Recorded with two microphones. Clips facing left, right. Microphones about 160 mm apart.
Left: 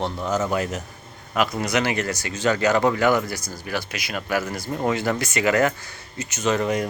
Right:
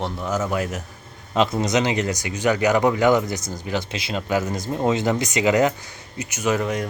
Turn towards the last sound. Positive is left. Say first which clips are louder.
# even
turn(degrees=-10)  # may be behind; listen again after turning